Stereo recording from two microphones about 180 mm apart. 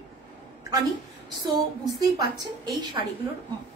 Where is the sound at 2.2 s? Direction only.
25° right (ahead or behind).